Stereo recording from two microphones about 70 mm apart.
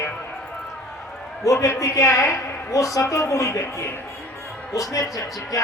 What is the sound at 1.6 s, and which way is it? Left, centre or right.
A woman's voice, left.